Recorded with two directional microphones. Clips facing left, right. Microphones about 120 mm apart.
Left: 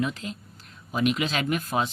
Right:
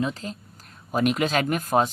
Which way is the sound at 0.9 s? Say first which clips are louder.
Right 3 dB; 45° right (ahead or behind).